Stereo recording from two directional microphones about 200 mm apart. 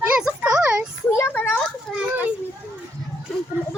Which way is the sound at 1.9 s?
Centre (ahead or behind).